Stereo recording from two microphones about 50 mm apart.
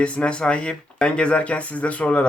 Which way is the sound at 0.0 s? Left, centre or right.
Left.